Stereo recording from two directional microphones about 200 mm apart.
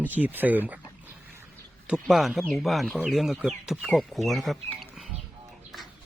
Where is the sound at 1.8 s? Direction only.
5° right (ahead or behind).